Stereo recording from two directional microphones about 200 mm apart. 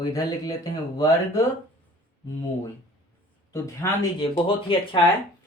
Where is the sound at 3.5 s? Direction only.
15° left (ahead or behind).